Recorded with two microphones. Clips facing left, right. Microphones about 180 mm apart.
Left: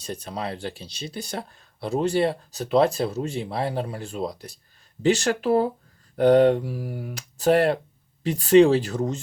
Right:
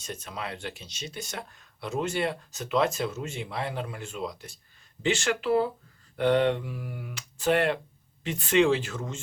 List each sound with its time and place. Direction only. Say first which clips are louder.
0.0 s speech: left 6 dB; 35° left (ahead or behind)